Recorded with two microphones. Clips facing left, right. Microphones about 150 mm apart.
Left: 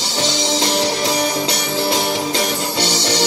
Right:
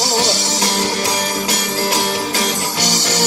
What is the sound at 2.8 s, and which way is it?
Music, 45° right (ahead or behind).